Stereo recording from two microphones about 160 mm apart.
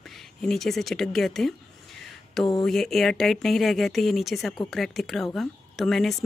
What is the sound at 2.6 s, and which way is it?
Speech, centre (ahead or behind).